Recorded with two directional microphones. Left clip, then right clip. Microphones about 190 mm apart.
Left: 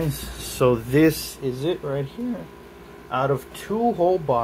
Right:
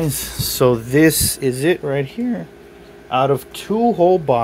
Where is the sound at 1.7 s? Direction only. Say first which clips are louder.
Right 7 dB; 60° right (ahead or behind).